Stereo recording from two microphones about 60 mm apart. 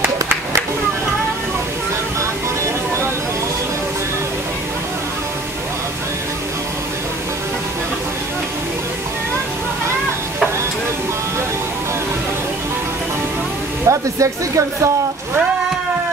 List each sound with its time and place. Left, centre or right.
13.8 s speech: right